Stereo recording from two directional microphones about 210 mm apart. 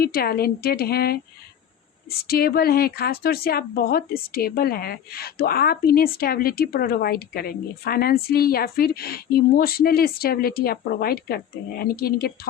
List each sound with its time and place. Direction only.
0.0 s speech: 45° left (ahead or behind)